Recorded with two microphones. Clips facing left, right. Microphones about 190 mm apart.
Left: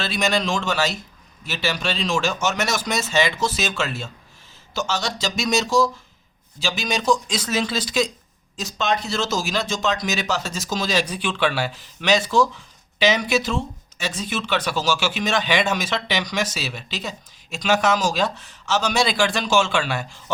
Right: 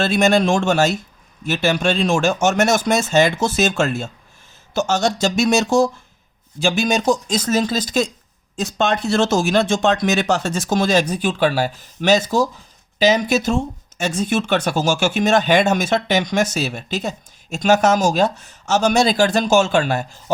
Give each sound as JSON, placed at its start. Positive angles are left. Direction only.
{"t": 0.0, "sound": "speech", "side_deg": -50}